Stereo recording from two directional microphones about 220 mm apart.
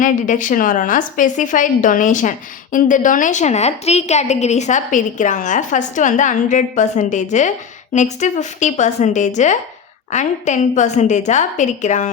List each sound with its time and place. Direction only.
0.0 s a woman's voice: 35° left (ahead or behind)